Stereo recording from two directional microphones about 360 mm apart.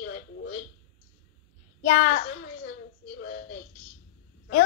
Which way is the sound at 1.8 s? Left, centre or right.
Left.